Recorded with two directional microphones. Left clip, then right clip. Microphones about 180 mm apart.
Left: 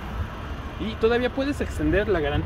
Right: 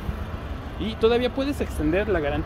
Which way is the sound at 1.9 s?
20° left (ahead or behind).